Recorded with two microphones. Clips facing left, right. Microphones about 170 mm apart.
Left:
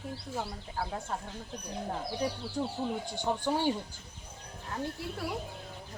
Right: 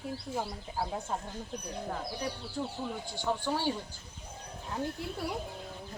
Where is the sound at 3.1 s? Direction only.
15° left (ahead or behind).